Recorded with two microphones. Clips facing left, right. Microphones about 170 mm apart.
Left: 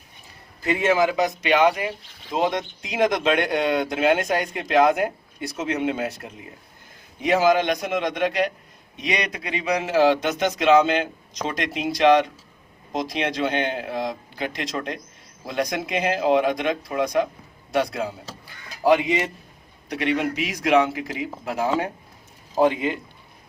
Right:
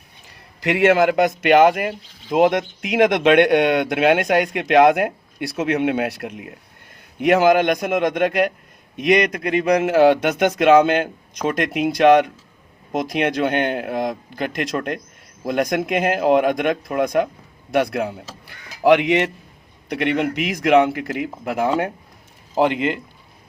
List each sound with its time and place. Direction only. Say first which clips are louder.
0.6 s speech: right 5 dB; 70° right (ahead or behind)
7.2 s a man's voice: right 4 dB; 60° right (ahead or behind)
18.8 s a man's voice: right 4 dB; 70° right (ahead or behind)
22.5 s speech: right 1 dB; 75° right (ahead or behind)